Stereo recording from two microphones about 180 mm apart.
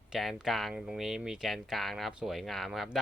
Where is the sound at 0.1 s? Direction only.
Centre (ahead or behind).